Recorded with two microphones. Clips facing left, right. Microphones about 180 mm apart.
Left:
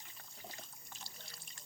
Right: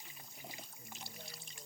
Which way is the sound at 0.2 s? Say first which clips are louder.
Even; 10° right (ahead or behind).